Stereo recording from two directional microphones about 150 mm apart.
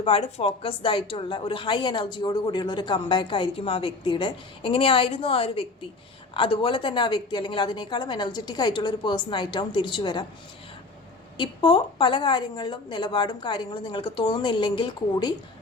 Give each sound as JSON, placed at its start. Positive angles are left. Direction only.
{"t": 0.0, "sound": "a woman's voice", "side_deg": 40}
{"t": 11.3, "sound": "a woman's voice", "side_deg": 35}